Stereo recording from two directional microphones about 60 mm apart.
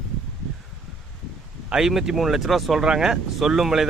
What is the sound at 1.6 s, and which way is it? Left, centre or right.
Speech, centre.